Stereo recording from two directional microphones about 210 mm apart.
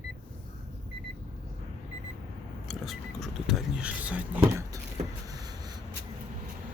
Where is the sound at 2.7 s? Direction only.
Centre (ahead or behind).